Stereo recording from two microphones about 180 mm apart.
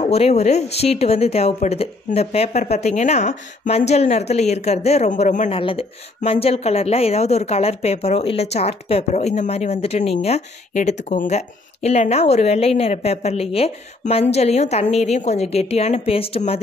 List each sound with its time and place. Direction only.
0.0 s a woman's voice: 35° left (ahead or behind)